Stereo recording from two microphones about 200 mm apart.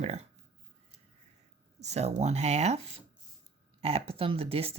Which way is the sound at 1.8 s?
35° right (ahead or behind).